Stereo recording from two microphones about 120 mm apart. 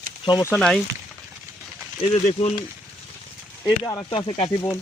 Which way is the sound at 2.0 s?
70° left (ahead or behind).